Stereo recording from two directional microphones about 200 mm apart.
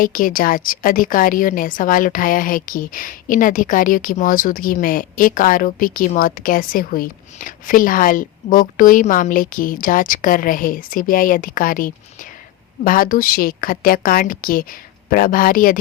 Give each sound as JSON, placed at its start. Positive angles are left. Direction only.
{"t": 0.0, "sound": "a woman's voice", "side_deg": 45}